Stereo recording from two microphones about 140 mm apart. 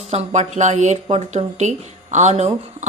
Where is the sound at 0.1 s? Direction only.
55° right (ahead or behind).